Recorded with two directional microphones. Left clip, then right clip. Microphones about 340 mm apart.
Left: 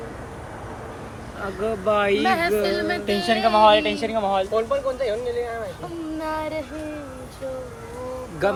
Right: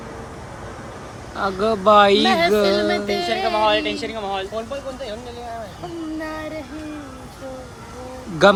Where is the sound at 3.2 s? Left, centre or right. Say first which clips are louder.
Left 5 dB; centre.